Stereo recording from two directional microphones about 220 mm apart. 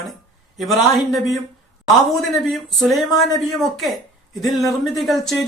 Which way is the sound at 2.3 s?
Centre (ahead or behind).